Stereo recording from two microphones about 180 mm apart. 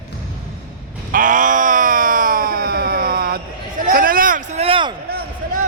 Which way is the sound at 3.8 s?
50° right (ahead or behind).